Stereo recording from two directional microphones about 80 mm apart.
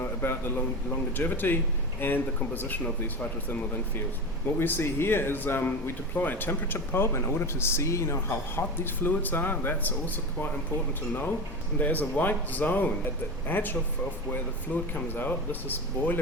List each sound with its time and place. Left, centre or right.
0.0 s a sound: left
1.1 s speech: left
4.6 s speech: left
11.1 s speech: left
14.9 s speech: left